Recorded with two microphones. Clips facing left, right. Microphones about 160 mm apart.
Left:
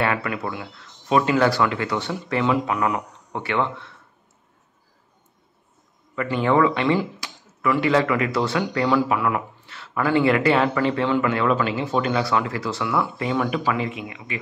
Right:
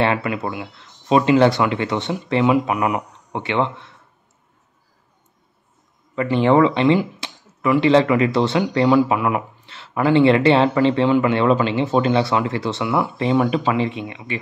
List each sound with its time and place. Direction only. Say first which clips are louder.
0.0 s speech: right 4 dB; 25° right (ahead or behind)
6.1 s speech: right 4 dB; 25° right (ahead or behind)